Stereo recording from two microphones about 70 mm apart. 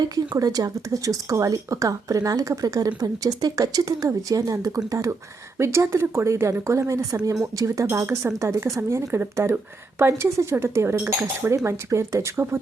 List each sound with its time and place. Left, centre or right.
0.3 s speech: right
10.9 s speech: right
11.5 s speech: right